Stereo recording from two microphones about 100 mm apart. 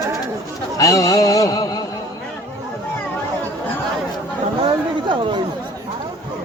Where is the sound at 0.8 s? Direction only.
35° left (ahead or behind).